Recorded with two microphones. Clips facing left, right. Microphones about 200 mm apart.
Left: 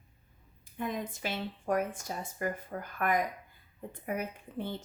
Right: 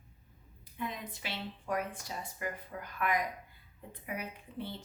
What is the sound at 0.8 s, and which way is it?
A woman's voice, 45° left (ahead or behind).